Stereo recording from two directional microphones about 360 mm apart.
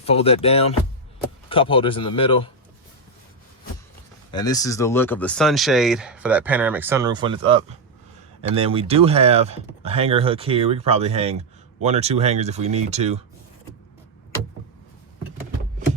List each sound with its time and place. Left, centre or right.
0.0 s speech: centre
4.3 s speech: centre